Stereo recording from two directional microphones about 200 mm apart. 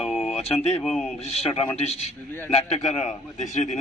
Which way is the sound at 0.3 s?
30° left (ahead or behind).